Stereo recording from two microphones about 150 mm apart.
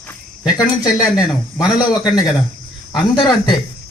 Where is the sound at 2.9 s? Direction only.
30° left (ahead or behind).